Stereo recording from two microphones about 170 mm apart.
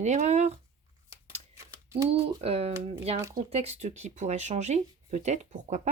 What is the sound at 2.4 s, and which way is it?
Speech, 35° right (ahead or behind).